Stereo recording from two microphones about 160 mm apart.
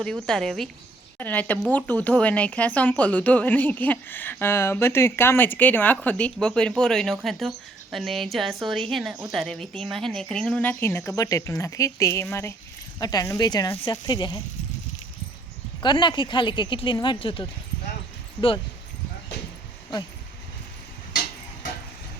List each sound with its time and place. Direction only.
0.0 s speech: 5° left (ahead or behind); by 14.4 s 25° left (ahead or behind)
15.8 s speech: 30° left (ahead or behind)